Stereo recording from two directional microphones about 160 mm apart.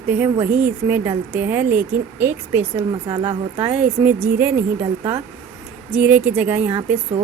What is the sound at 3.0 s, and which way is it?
Speech, 30° right (ahead or behind).